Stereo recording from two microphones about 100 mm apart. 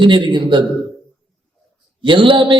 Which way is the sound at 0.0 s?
50° right (ahead or behind).